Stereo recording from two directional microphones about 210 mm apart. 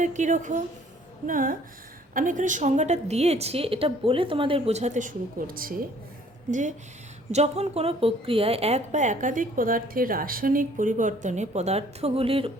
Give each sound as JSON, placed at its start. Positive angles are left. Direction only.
{"t": 0.0, "sound": "a woman's voice", "side_deg": -35}